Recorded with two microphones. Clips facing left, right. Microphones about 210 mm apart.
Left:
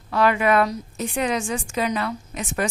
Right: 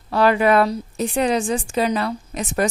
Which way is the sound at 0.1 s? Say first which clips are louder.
Right 3 dB; 35° right (ahead or behind).